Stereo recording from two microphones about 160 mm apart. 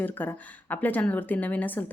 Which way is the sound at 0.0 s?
10° left (ahead or behind).